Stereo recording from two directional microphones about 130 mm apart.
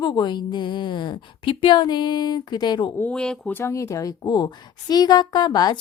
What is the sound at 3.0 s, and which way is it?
Speech, 10° left (ahead or behind).